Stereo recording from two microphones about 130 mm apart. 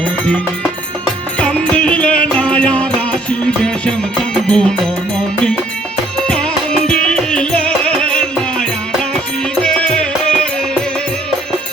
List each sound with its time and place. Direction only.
0.0 s music: 10° left (ahead or behind)
6.1 s music: 5° left (ahead or behind)